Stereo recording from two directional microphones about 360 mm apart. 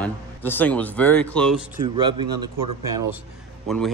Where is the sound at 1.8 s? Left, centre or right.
Centre.